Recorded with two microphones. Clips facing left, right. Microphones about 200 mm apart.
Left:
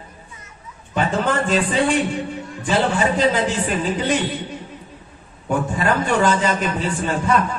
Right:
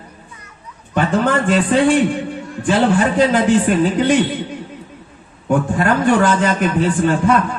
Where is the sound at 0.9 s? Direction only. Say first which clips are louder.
Right 4 dB; 55° right (ahead or behind).